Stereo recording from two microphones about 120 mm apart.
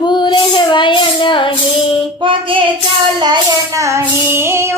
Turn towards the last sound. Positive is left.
turn(degrees=-20)  # may be behind; listen again after turning